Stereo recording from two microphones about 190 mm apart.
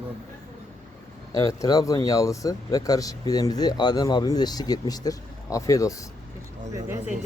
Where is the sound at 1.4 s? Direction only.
20° left (ahead or behind).